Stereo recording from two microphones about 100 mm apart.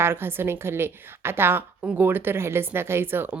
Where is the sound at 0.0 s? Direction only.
25° right (ahead or behind).